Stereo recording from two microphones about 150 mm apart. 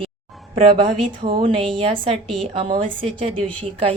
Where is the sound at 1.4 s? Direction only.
35° right (ahead or behind).